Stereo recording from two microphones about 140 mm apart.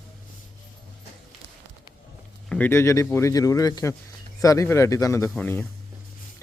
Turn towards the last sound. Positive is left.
turn(degrees=15)  # may be behind; listen again after turning